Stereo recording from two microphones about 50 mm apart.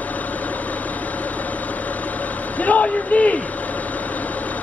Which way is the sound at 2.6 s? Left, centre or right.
Left.